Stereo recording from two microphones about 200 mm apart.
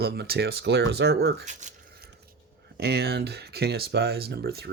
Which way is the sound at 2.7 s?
55° right (ahead or behind).